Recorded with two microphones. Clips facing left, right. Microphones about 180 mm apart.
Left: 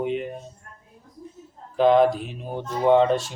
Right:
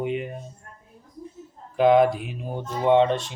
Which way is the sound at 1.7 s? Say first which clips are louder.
Even; 5° right (ahead or behind).